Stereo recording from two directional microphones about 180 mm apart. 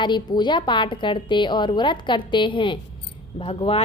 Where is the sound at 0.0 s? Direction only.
25° left (ahead or behind).